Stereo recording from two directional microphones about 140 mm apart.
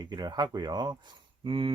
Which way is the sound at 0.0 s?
30° right (ahead or behind).